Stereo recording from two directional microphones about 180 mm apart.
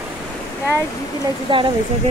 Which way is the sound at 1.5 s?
25° right (ahead or behind).